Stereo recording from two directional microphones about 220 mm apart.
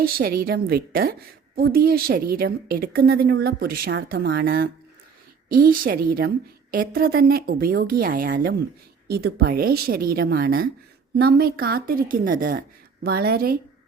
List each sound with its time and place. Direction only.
0.0 s a woman's voice: 40° right (ahead or behind)